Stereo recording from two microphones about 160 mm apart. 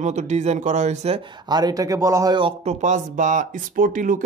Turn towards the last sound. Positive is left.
turn(degrees=-55)  # may be behind; listen again after turning